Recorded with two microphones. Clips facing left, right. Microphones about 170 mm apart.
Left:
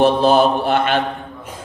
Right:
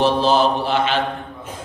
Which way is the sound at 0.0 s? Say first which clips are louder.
Left 3 dB; 55° left (ahead or behind).